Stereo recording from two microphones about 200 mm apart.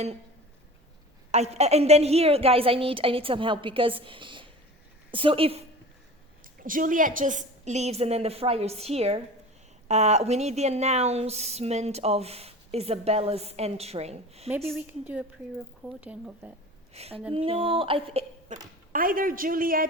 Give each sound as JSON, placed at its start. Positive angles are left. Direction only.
{"t": 1.3, "sound": "a woman's voice", "side_deg": -35}
{"t": 6.4, "sound": "a woman's voice", "side_deg": -45}
{"t": 14.5, "sound": "a woman's voice", "side_deg": -5}
{"t": 16.9, "sound": "a woman's voice", "side_deg": -30}